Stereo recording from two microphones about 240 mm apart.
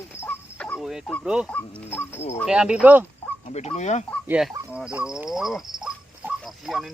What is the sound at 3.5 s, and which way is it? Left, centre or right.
Speech, left.